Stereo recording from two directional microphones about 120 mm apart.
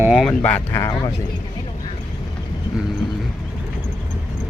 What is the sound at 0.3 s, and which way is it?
Speech, 10° left (ahead or behind).